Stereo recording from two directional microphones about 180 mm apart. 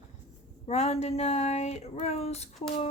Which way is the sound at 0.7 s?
35° left (ahead or behind).